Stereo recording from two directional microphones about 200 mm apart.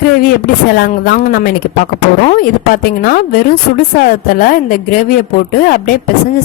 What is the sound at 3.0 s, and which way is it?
A woman's voice, 45° left (ahead or behind).